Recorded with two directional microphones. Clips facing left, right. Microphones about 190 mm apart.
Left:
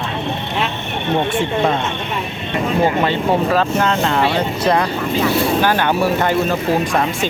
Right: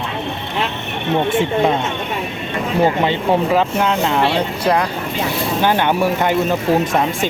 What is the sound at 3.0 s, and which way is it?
Speech, 15° right (ahead or behind).